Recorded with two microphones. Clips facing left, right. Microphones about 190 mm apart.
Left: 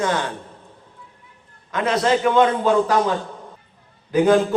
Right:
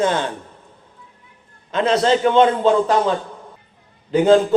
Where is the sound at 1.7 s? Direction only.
25° right (ahead or behind).